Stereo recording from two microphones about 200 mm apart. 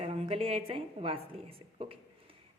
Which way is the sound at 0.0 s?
30° right (ahead or behind).